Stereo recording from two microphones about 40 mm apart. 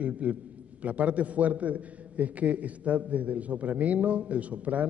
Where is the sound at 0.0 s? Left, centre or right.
Right.